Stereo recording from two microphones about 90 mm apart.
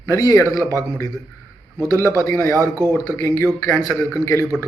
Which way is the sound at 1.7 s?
35° right (ahead or behind).